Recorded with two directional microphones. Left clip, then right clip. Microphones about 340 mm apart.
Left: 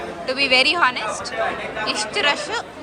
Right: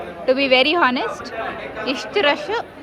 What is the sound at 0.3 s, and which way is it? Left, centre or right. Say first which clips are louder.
A woman's voice: right 2 dB; centre.